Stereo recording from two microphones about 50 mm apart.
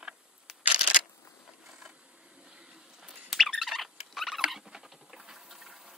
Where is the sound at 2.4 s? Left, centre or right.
Centre.